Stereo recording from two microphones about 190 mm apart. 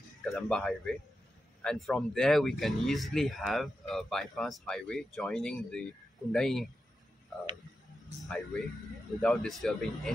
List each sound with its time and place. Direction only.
0.2 s speech: centre (ahead or behind)
8.2 s speech: centre (ahead or behind)